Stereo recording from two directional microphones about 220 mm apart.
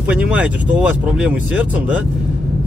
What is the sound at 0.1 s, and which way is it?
Speech, 5° right (ahead or behind).